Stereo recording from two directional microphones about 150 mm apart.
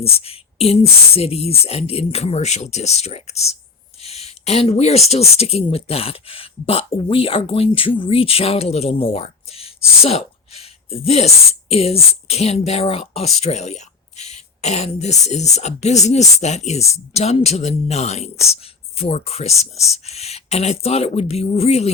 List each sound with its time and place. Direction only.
0.0 s speech: 40° left (ahead or behind)